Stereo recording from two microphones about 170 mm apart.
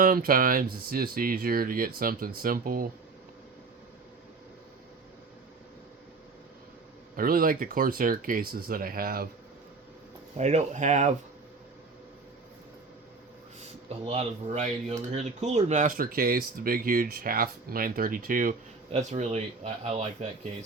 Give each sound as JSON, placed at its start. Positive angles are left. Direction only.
{"t": 0.0, "sound": "speech", "side_deg": -55}
{"t": 7.2, "sound": "speech", "side_deg": -55}
{"t": 10.3, "sound": "speech", "side_deg": -40}
{"t": 14.0, "sound": "speech", "side_deg": -35}
{"t": 18.9, "sound": "speech", "side_deg": -40}